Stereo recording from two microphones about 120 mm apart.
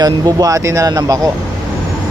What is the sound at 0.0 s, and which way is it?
Speech, 30° right (ahead or behind).